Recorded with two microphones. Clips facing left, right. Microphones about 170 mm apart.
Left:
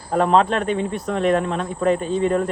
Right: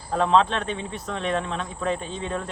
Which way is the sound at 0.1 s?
45° left (ahead or behind).